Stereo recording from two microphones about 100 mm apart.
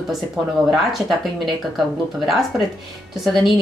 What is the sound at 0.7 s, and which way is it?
Speech, centre (ahead or behind).